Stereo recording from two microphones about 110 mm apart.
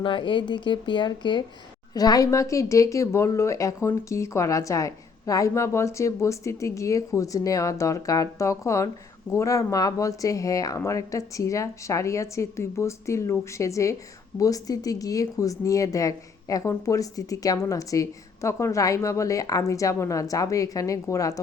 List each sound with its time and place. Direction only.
0.0 s speech: 50° left (ahead or behind); by 21.4 s 30° left (ahead or behind)